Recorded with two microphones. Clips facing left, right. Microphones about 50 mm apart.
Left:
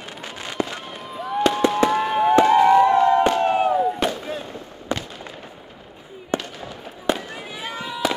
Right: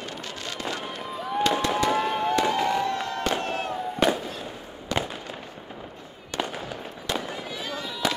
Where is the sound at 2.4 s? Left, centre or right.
Left.